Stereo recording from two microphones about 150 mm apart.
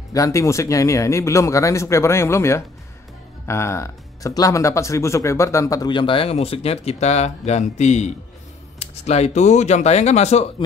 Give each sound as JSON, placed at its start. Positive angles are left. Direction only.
{"t": 0.1, "sound": "speech", "side_deg": 20}